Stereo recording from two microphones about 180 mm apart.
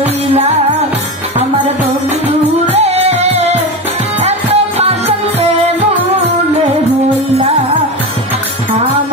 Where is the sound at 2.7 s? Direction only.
35° right (ahead or behind).